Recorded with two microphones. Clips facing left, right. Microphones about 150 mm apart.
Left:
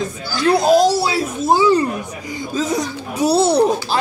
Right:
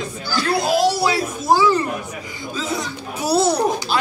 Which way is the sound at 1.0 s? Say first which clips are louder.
Left 1 dB; 30° left (ahead or behind).